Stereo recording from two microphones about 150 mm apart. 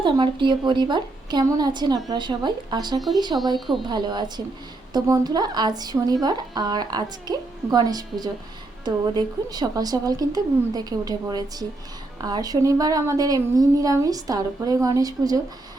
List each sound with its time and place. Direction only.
0.0 s speech: 30° right (ahead or behind)